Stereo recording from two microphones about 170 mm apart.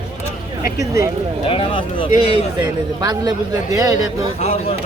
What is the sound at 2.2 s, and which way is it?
A man's voice, 25° right (ahead or behind).